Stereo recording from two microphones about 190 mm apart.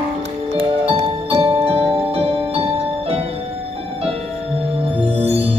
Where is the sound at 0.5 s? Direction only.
30° right (ahead or behind).